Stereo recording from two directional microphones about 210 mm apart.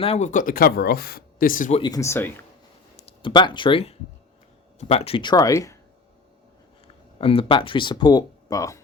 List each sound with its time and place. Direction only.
0.0 s speech: 30° left (ahead or behind)
1.8 s speech: 15° left (ahead or behind)
2.9 s speech: 25° left (ahead or behind)
6.8 s speech: 25° left (ahead or behind)